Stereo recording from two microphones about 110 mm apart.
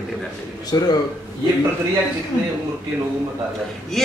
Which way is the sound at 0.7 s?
35° left (ahead or behind).